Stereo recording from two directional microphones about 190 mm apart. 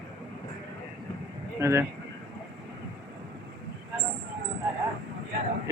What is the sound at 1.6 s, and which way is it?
Speech, 15° right (ahead or behind).